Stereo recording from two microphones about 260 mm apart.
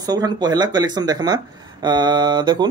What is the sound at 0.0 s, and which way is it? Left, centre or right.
Speech, centre.